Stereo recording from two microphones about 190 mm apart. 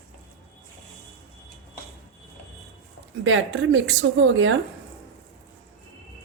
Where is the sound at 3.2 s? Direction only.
90° right.